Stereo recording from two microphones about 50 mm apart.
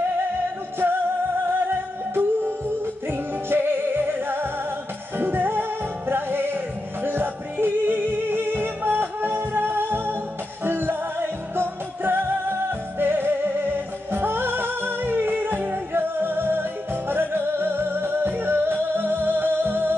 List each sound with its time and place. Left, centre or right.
1.5 s music: right